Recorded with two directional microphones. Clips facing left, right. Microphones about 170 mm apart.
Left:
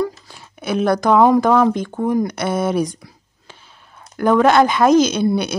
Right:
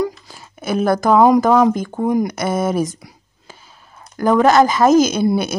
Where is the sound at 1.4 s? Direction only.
5° right (ahead or behind).